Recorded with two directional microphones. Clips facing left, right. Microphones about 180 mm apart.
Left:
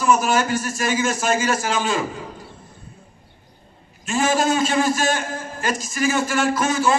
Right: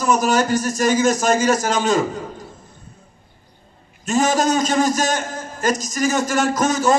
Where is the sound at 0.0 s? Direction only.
40° right (ahead or behind).